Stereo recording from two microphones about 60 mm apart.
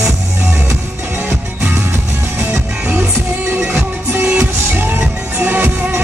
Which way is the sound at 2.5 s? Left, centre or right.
Right.